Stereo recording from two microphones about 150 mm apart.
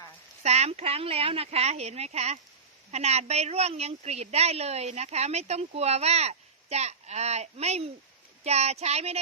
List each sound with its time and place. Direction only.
0.4 s a woman's voice: 45° right (ahead or behind)